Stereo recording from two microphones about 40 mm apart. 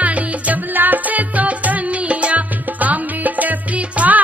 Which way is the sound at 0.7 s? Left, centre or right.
Right.